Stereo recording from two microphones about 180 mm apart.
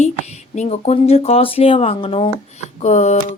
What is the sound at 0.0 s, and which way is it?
Speech, 40° left (ahead or behind).